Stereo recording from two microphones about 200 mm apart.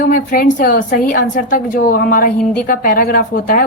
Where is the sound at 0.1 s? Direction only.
45° left (ahead or behind).